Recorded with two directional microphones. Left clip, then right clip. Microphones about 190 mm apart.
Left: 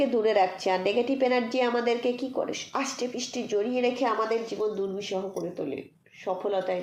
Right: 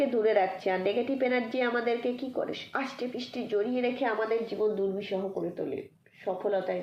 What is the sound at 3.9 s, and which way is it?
Speech, 40° left (ahead or behind).